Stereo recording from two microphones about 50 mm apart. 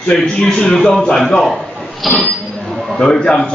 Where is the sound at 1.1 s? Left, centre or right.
Centre.